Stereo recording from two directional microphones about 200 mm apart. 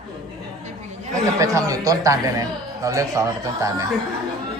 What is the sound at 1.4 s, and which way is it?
Speech, 15° right (ahead or behind).